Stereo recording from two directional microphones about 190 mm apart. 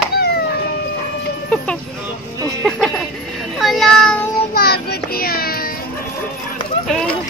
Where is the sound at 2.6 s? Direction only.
Centre (ahead or behind).